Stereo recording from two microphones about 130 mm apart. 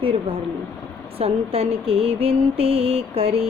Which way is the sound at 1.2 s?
50° right (ahead or behind).